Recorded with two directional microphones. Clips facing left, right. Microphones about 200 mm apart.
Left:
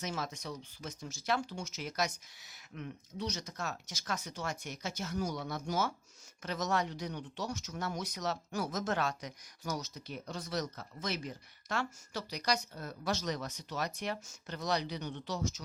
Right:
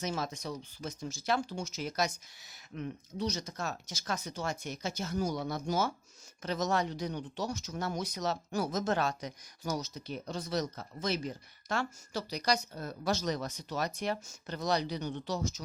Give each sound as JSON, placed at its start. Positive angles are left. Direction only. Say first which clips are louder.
{"t": 0.0, "sound": "speech", "louder": "right 3 dB", "side_deg": -30}